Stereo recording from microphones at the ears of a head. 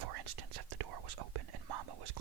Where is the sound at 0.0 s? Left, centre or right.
Right.